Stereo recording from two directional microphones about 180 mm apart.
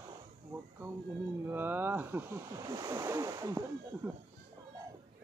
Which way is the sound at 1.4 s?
10° right (ahead or behind).